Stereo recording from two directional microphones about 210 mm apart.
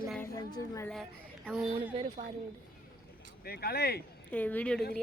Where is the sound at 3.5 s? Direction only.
50° left (ahead or behind).